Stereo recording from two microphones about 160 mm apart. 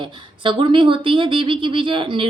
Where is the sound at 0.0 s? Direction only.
30° right (ahead or behind).